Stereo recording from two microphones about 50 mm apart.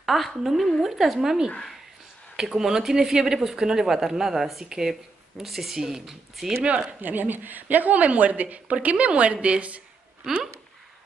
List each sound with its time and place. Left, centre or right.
0.0 s a woman's voice: centre
6.4 s a woman's voice: right
7.0 s a woman's voice: right
10.3 s speech: centre